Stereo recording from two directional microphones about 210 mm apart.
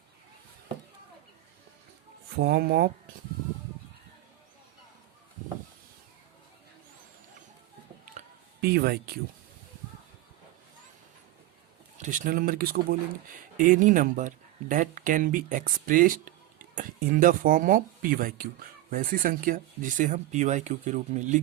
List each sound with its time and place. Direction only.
2.3 s speech: 50° right (ahead or behind)
8.6 s speech: 50° right (ahead or behind)
11.9 s speech: 35° right (ahead or behind)